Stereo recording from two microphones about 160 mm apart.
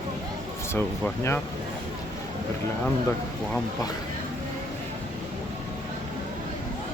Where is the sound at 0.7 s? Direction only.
15° left (ahead or behind).